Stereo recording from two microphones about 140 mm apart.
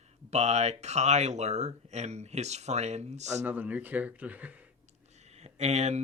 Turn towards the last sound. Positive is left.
turn(degrees=-50)  # may be behind; listen again after turning